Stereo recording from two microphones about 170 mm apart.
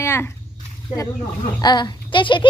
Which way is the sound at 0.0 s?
15° left (ahead or behind).